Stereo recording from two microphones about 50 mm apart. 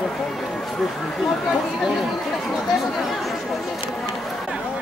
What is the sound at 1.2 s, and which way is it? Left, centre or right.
Speech, centre.